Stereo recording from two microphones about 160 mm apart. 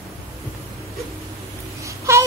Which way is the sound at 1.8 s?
20° right (ahead or behind).